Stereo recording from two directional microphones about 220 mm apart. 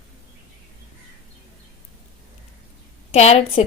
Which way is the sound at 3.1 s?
30° left (ahead or behind).